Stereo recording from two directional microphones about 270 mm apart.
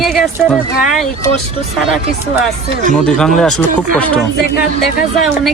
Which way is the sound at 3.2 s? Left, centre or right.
Centre.